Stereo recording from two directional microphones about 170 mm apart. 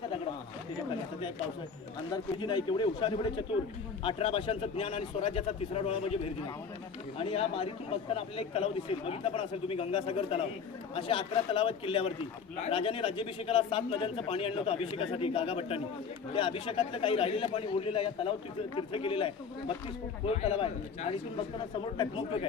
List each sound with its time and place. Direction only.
2.4 s speech: 25° left (ahead or behind)
7.2 s speech: 35° left (ahead or behind)